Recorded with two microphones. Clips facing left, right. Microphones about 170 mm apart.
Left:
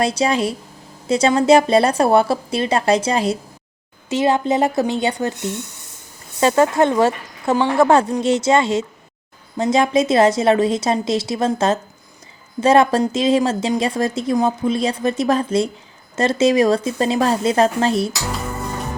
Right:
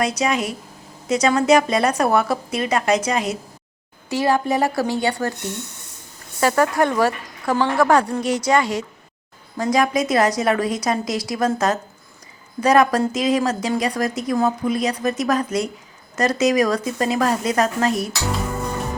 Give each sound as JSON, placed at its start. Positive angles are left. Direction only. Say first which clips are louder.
{"t": 0.0, "sound": "a woman's voice", "louder": "left 3 dB", "side_deg": 30}
{"t": 18.3, "sound": "music", "louder": "right 1 dB", "side_deg": 0}